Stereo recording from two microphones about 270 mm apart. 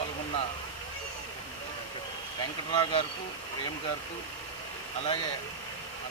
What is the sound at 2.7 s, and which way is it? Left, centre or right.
Speech, left.